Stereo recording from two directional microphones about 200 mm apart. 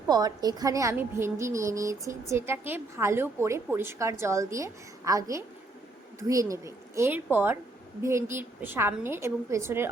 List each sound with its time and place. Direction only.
0.1 s a woman's voice: 20° right (ahead or behind)